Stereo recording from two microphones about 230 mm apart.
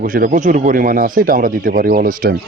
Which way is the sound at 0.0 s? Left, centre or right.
Right.